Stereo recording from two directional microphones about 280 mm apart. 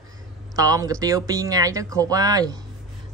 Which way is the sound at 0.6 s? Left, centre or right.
Centre.